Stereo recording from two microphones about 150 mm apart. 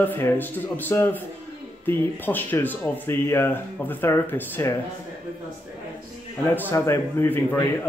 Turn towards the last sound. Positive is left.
turn(degrees=15)  # may be behind; listen again after turning